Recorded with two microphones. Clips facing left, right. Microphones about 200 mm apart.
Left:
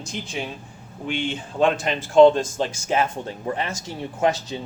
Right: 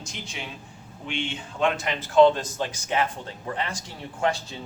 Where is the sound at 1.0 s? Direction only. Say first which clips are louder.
Left 5 dB; 40° left (ahead or behind).